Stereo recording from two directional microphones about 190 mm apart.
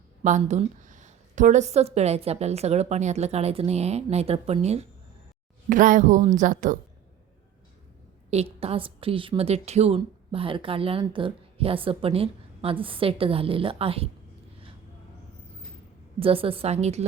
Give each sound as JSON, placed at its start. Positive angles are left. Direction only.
{"t": 0.2, "sound": "a woman's voice", "side_deg": -40}
{"t": 8.3, "sound": "a woman's voice", "side_deg": -30}
{"t": 16.2, "sound": "a woman's voice", "side_deg": -30}